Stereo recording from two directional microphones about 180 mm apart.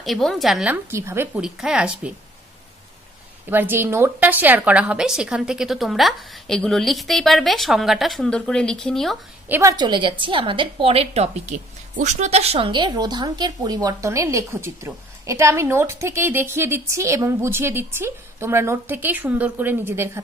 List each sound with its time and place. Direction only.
0.0 s a woman's voice: centre (ahead or behind)
3.4 s a woman's voice: 10° right (ahead or behind)
9.5 s a woman's voice: 15° right (ahead or behind)